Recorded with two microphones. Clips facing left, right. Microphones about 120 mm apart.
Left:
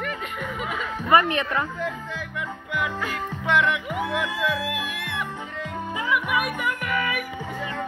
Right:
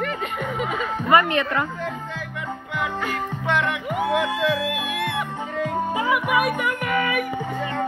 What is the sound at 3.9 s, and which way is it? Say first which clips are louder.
Speech: right 5 dB; 55° right (ahead or behind).